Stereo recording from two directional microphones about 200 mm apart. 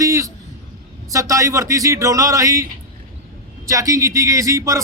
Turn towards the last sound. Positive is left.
turn(degrees=-15)  # may be behind; listen again after turning